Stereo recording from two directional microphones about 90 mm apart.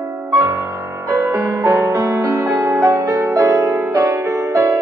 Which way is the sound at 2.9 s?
40° right (ahead or behind).